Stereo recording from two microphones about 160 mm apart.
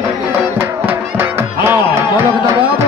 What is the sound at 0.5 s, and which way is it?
Music, 15° right (ahead or behind).